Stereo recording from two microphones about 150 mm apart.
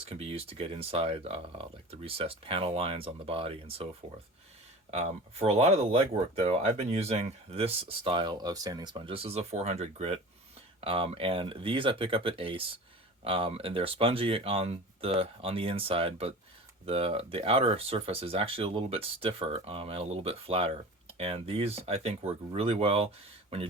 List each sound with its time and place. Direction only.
0.0 s speech: 40° right (ahead or behind)
4.9 s speech: 45° right (ahead or behind)